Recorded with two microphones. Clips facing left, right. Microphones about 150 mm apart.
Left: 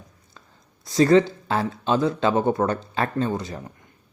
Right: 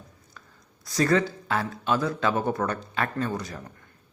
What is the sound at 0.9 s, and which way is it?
Speech, 25° left (ahead or behind).